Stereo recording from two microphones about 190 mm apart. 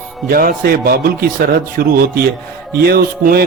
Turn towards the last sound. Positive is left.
turn(degrees=-55)  # may be behind; listen again after turning